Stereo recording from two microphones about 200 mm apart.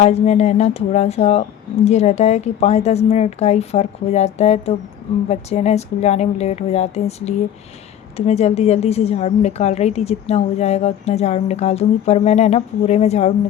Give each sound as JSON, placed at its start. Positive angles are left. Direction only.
{"t": 0.0, "sound": "a woman's voice", "side_deg": 35}